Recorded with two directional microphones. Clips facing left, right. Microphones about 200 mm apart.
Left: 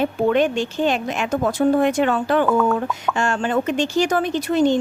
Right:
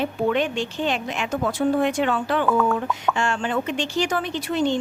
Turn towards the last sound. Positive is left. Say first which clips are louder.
# left 5 dB
turn(degrees=45)  # may be behind; listen again after turning